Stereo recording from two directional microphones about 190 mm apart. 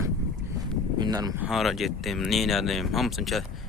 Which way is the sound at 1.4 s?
Centre (ahead or behind).